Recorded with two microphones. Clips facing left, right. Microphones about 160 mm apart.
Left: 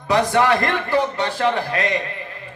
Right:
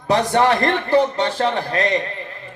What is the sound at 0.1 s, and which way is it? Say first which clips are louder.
Speech: right 1 dB; 40° right (ahead or behind).